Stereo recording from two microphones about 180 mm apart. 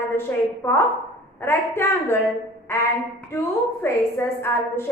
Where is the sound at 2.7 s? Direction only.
15° left (ahead or behind).